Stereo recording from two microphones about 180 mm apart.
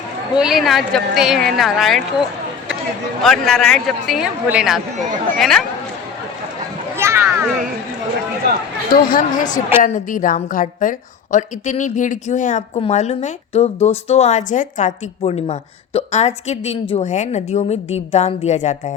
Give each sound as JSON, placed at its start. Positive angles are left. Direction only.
{"t": 0.3, "sound": "a woman's voice", "side_deg": 0}
{"t": 3.2, "sound": "a woman's voice", "side_deg": 5}
{"t": 6.9, "sound": "a sound", "side_deg": -15}
{"t": 9.0, "sound": "a woman's voice", "side_deg": 50}